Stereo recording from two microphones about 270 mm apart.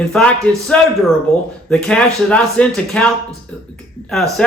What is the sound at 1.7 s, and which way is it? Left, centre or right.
A man's voice, centre.